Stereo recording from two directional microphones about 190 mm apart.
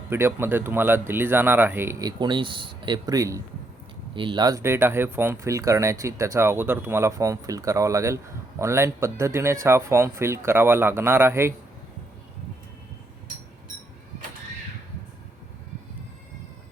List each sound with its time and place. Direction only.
0.1 s speech: 10° right (ahead or behind)